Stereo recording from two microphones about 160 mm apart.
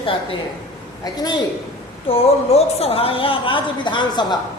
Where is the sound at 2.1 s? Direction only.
40° left (ahead or behind).